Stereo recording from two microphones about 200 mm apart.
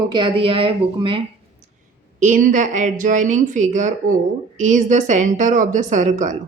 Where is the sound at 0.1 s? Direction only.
25° right (ahead or behind).